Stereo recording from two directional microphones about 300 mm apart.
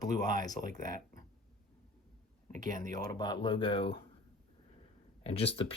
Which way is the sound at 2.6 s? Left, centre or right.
Centre.